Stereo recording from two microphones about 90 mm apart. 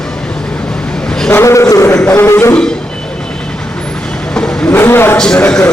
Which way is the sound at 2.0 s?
25° left (ahead or behind).